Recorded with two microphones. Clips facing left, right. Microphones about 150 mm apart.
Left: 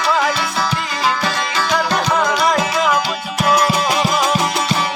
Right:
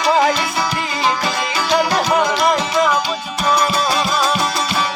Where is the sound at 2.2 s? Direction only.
5° left (ahead or behind).